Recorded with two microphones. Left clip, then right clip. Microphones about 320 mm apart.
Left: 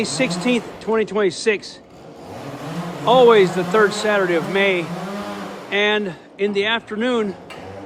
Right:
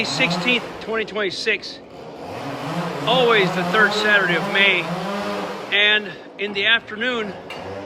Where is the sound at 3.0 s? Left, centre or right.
Centre.